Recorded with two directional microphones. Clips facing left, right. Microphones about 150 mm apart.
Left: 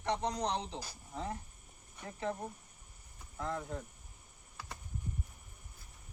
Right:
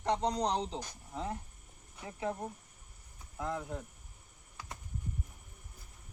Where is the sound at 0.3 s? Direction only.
35° right (ahead or behind).